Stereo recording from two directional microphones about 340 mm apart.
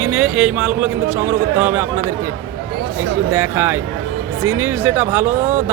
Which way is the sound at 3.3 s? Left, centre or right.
Centre.